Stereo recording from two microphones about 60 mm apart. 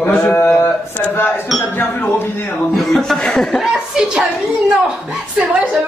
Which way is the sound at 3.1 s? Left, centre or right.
Centre.